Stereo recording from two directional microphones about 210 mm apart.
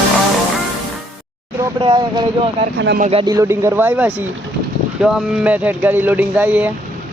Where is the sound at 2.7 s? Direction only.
55° right (ahead or behind).